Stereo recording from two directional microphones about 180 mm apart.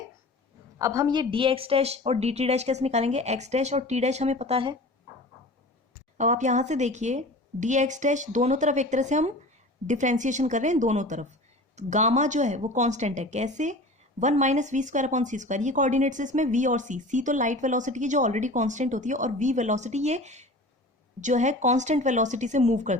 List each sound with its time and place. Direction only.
0.8 s a woman's voice: 20° right (ahead or behind)
6.1 s a woman's voice: 40° right (ahead or behind)